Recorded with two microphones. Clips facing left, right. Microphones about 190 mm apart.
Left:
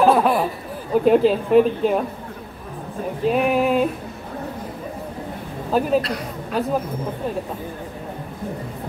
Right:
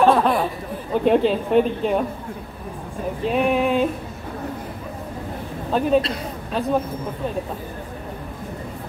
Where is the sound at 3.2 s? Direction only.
Centre (ahead or behind).